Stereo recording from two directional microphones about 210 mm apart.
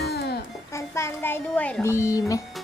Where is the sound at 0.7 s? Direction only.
15° left (ahead or behind).